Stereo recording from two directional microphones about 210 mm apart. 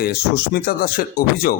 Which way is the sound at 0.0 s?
45° left (ahead or behind).